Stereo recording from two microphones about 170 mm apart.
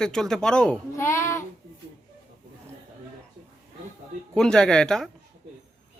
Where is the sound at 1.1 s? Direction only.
15° left (ahead or behind).